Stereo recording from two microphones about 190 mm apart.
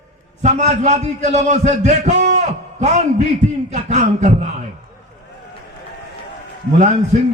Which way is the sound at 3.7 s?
35° right (ahead or behind).